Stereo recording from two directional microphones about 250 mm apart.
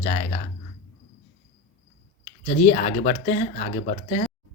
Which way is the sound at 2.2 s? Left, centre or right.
Left.